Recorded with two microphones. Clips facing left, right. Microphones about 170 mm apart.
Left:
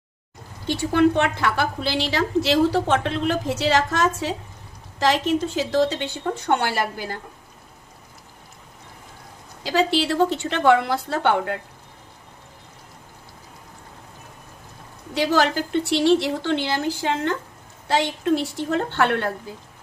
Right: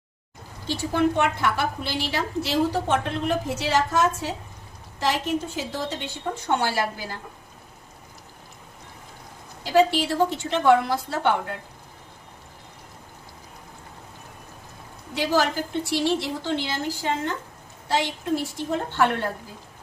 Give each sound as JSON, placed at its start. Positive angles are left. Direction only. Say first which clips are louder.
{"t": 0.8, "sound": "a woman's voice", "louder": "left 4 dB", "side_deg": 75}
{"t": 6.5, "sound": "speech", "louder": "left 1 dB", "side_deg": 60}
{"t": 9.7, "sound": "a woman's voice", "louder": "even", "side_deg": 80}
{"t": 15.1, "sound": "a woman's voice", "louder": "left 3 dB", "side_deg": 75}
{"t": 18.7, "sound": "a woman's voice", "louder": "left 2 dB", "side_deg": 70}